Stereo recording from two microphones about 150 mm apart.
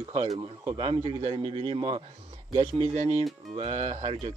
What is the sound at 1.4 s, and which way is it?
Speech, 40° right (ahead or behind).